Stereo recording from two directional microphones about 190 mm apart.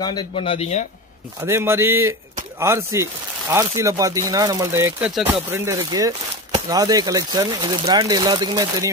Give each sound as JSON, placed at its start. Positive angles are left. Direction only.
{"t": 0.0, "sound": "speech", "side_deg": 25}
{"t": 1.4, "sound": "speech", "side_deg": -15}